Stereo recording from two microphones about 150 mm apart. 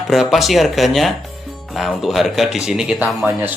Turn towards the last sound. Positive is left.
turn(degrees=-15)  # may be behind; listen again after turning